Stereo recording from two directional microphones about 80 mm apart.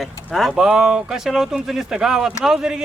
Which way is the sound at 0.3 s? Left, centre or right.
Centre.